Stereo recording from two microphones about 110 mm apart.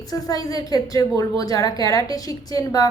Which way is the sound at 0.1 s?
35° left (ahead or behind).